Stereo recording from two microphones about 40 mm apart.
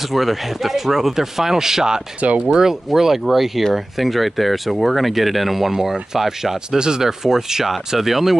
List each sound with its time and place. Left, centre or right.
0.1 s speech: centre
2.2 s speech: right
2.5 s speech: centre